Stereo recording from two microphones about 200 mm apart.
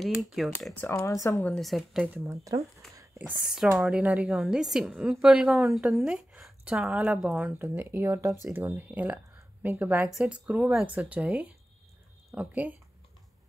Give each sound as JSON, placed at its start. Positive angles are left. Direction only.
{"t": 0.0, "sound": "a woman's voice", "side_deg": 0}
{"t": 0.8, "sound": "speech", "side_deg": 15}
{"t": 1.5, "sound": "a woman's voice", "side_deg": 0}
{"t": 2.2, "sound": "speech", "side_deg": -15}
{"t": 3.0, "sound": "a woman's voice", "side_deg": -5}